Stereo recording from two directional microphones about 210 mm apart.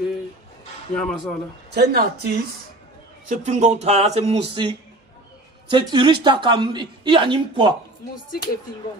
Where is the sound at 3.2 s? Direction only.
35° right (ahead or behind).